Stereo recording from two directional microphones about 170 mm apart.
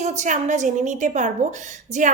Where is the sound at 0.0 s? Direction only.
45° right (ahead or behind).